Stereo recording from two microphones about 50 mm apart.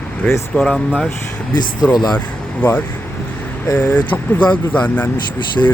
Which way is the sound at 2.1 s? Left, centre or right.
Left.